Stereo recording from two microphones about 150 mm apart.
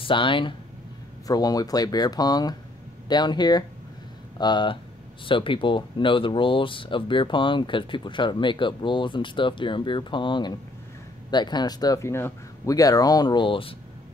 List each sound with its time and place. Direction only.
0.0 s speech: 35° left (ahead or behind)